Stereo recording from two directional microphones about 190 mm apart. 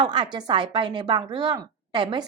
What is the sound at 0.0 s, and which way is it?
A woman's voice, 25° right (ahead or behind).